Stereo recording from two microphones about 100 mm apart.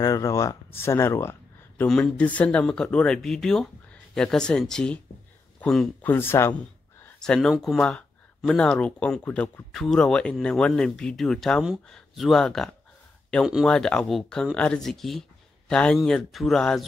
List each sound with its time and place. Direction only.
0.0 s speech: 35° left (ahead or behind)
1.9 s speech: 10° left (ahead or behind)
6.0 s speech: 25° left (ahead or behind)
7.2 s speech: 5° left (ahead or behind)